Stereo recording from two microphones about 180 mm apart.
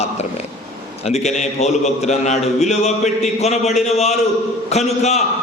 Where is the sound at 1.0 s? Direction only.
35° left (ahead or behind).